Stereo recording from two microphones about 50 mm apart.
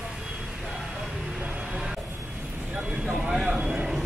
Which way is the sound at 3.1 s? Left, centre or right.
Centre.